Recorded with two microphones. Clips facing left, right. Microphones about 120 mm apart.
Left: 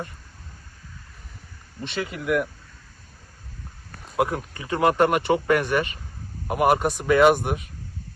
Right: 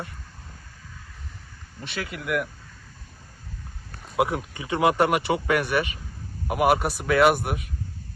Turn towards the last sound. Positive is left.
turn(degrees=-5)  # may be behind; listen again after turning